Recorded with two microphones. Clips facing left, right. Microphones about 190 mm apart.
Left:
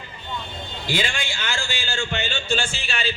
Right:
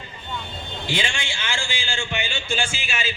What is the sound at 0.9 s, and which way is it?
A man's voice, 20° right (ahead or behind).